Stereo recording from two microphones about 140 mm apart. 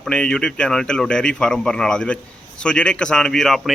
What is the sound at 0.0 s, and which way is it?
A man's voice, 5° left (ahead or behind).